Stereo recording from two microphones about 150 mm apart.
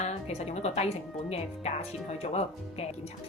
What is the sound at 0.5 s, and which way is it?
A woman's voice, 45° left (ahead or behind).